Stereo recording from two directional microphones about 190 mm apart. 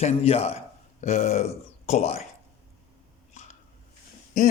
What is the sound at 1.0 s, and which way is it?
A man's voice, 35° left (ahead or behind).